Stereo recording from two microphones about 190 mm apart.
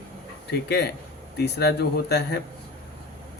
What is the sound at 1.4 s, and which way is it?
Speech, 60° left (ahead or behind).